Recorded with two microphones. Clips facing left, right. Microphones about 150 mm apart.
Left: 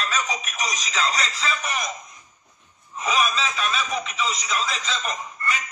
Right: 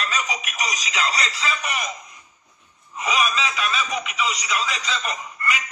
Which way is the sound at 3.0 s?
35° left (ahead or behind).